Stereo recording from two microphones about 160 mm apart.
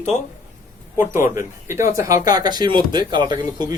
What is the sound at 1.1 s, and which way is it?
Speech, 15° right (ahead or behind).